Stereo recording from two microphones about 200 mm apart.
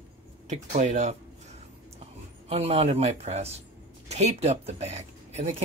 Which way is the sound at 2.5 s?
30° right (ahead or behind).